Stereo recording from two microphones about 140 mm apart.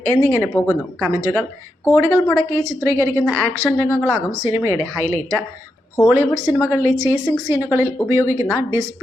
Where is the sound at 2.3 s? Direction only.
20° right (ahead or behind).